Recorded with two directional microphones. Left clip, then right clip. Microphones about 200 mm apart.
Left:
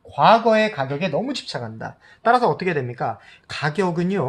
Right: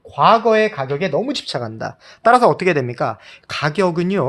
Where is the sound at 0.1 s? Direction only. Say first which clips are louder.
Right 2 dB; 35° right (ahead or behind).